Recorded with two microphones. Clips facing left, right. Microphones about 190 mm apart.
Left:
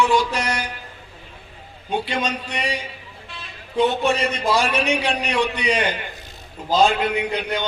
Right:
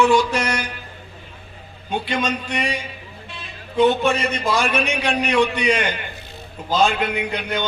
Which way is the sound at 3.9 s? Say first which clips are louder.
Right 1 dB; 35° left (ahead or behind).